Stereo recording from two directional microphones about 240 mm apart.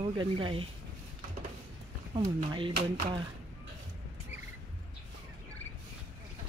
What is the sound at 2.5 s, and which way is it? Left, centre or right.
Speech, right.